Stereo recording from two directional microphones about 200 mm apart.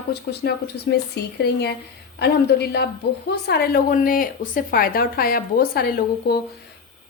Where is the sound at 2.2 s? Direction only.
55° left (ahead or behind).